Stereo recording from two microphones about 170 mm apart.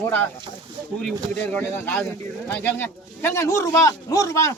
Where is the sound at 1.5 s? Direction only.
10° left (ahead or behind).